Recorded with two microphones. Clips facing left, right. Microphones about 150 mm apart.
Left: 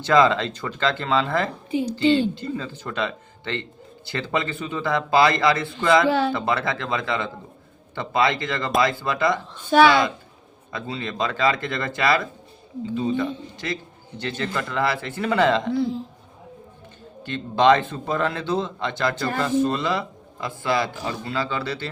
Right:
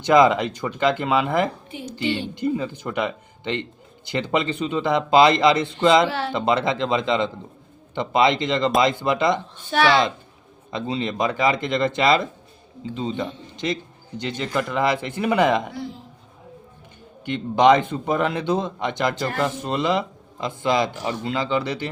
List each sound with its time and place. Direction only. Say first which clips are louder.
0.0 s a man's voice: right 2 dB; 15° right (ahead or behind)
10.7 s a man's voice: right 5 dB; 20° right (ahead or behind)
17.2 s a man's voice: right 2 dB; 15° right (ahead or behind)